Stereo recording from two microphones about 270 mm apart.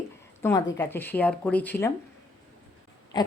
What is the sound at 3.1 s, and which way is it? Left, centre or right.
Wheeze, centre.